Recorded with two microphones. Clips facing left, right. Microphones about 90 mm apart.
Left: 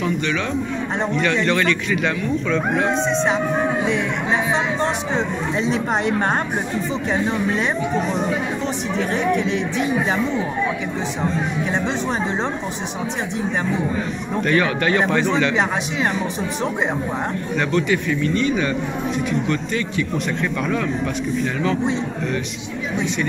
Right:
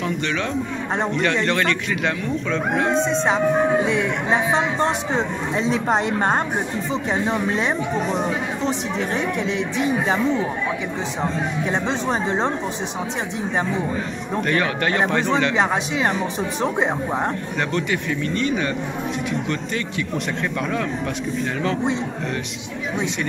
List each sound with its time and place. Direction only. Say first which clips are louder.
0.9 s a man's voice: even; 40° right (ahead or behind)
5.6 s a man's voice: right 1 dB; 35° right (ahead or behind)
11.7 s a man's voice: right 1 dB; 35° right (ahead or behind)
14.4 s a man's voice: left 3 dB; 35° right (ahead or behind)